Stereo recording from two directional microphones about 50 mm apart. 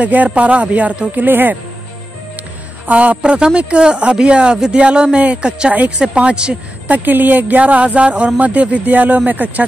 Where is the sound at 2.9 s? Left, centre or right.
Right.